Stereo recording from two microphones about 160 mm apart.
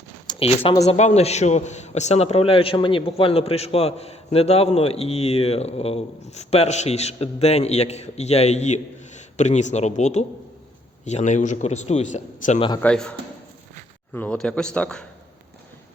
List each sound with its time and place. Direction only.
0.3 s a man's voice: 35° left (ahead or behind)
12.8 s a man's voice: 5° left (ahead or behind)